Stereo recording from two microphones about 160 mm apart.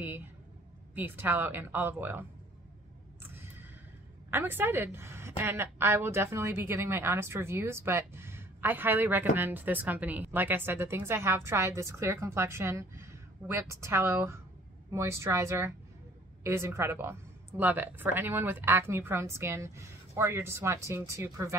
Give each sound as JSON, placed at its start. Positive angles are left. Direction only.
{"t": 0.9, "sound": "a woman's voice", "side_deg": -10}
{"t": 4.3, "sound": "a woman's voice", "side_deg": -15}